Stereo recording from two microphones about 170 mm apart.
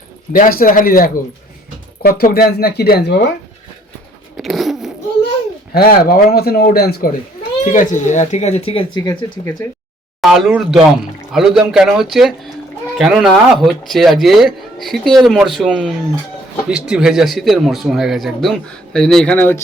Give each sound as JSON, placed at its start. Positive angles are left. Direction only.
{"t": 0.3, "sound": "speech", "side_deg": 55}
{"t": 4.4, "sound": "zipper", "side_deg": 0}
{"t": 5.7, "sound": "speech", "side_deg": 60}
{"t": 7.6, "sound": "speech", "side_deg": 50}
{"t": 9.0, "sound": "speech", "side_deg": 20}
{"t": 10.2, "sound": "speech", "side_deg": 0}